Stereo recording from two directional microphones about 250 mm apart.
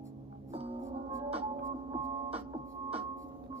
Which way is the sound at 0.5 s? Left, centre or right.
Right.